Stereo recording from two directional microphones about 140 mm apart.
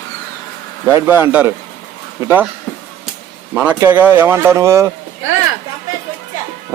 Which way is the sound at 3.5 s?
10° right (ahead or behind).